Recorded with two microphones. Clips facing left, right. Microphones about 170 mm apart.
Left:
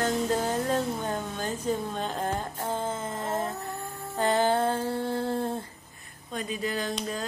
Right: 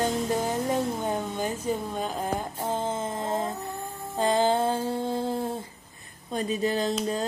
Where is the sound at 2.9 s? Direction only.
20° right (ahead or behind).